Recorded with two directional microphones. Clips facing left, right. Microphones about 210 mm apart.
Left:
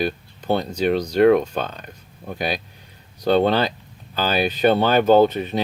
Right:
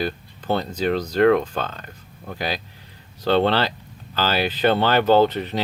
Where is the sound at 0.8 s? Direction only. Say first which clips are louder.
Left 2 dB; 15° left (ahead or behind).